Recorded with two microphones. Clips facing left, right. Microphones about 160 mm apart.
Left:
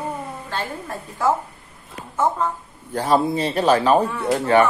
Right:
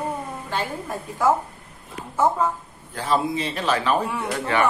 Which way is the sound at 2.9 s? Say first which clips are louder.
Left 4 dB; 40° left (ahead or behind).